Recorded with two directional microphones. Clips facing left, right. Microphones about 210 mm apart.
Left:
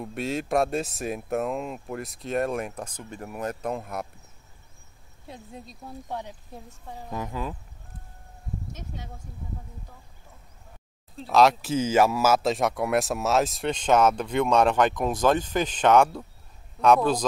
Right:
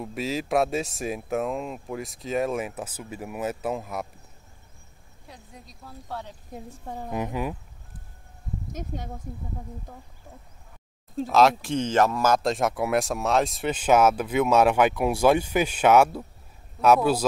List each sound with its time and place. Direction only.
0.0 s speech: centre (ahead or behind)
5.3 s speech: 25° left (ahead or behind)
7.1 s speech: 15° right (ahead or behind)
11.2 s speech: centre (ahead or behind)